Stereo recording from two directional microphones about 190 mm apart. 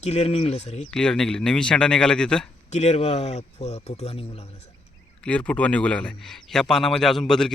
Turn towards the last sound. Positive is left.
turn(degrees=5)  # may be behind; listen again after turning